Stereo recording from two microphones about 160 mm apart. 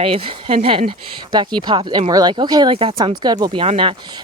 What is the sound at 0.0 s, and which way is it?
Speech, 35° right (ahead or behind).